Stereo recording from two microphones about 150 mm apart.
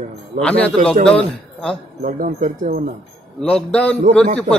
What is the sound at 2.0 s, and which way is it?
Speech, 60° right (ahead or behind).